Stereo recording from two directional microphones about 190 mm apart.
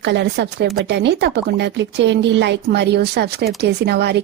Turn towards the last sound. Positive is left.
turn(degrees=-60)  # may be behind; listen again after turning